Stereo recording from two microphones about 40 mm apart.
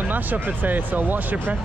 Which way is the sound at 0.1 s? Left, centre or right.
Right.